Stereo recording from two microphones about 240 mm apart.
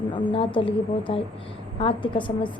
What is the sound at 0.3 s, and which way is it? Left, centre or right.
A woman's voice, left.